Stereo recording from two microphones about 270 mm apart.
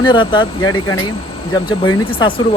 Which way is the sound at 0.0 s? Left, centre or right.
Centre.